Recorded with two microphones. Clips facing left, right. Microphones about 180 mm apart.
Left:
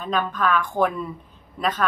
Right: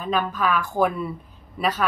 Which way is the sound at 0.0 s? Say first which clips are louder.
Even; 5° right (ahead or behind).